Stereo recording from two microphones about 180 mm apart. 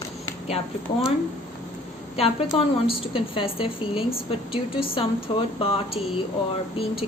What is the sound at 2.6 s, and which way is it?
A woman's voice, 30° left (ahead or behind).